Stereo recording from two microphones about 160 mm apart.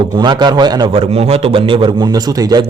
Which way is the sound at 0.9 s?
40° right (ahead or behind).